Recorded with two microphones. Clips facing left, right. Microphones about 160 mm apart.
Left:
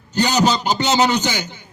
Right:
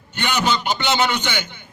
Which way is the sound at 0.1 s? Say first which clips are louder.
Left 5 dB; 40° left (ahead or behind).